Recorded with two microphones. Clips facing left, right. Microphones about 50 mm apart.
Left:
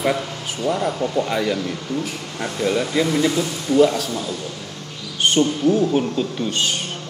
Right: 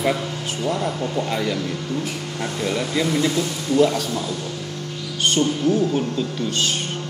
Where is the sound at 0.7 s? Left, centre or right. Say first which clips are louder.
Left 3 dB; centre.